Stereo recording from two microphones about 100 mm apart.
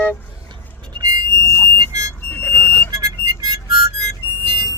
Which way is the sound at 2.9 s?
35° right (ahead or behind).